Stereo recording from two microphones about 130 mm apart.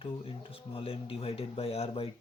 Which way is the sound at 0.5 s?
45° left (ahead or behind).